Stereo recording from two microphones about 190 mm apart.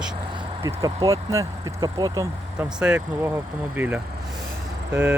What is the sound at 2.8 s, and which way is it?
Speech, 5° right (ahead or behind).